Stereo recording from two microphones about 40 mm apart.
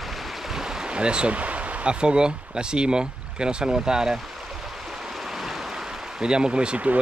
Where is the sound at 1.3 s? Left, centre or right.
Right; by 4.2 s centre.